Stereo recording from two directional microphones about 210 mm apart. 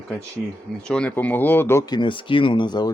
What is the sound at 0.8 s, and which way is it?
Speech, 5° left (ahead or behind).